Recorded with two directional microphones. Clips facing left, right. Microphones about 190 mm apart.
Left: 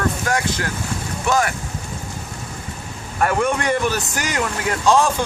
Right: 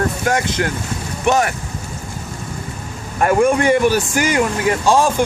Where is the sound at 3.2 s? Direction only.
10° right (ahead or behind).